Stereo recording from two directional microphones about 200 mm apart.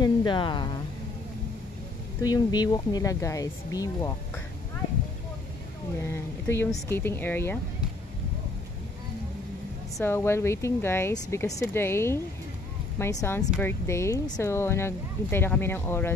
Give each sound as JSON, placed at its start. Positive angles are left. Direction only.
{"t": 0.0, "sound": "a sound", "side_deg": 25}
{"t": 2.2, "sound": "speech", "side_deg": 20}
{"t": 6.1, "sound": "speech", "side_deg": 10}
{"t": 9.9, "sound": "speech", "side_deg": 10}